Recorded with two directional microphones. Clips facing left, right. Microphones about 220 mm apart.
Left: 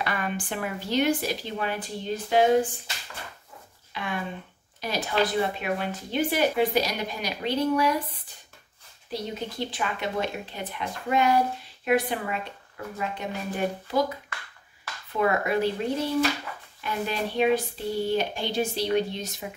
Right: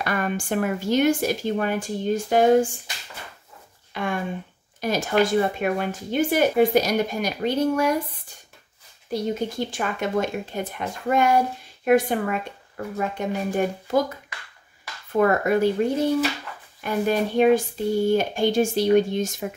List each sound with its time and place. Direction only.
0.0 s speech: 45° right (ahead or behind)
3.9 s speech: 50° right (ahead or behind)
9.1 s speech: 45° right (ahead or behind)
15.1 s speech: 50° right (ahead or behind)